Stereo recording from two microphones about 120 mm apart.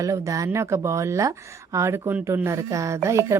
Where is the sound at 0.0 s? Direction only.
30° right (ahead or behind).